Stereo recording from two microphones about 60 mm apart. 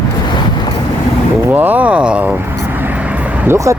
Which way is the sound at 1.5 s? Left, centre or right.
Right.